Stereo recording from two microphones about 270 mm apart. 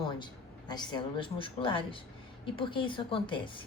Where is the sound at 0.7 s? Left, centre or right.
Centre.